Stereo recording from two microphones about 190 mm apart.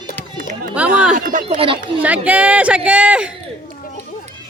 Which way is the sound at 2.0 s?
10° right (ahead or behind).